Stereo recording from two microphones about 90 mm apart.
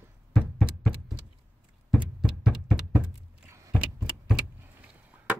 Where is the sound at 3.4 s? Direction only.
30° right (ahead or behind).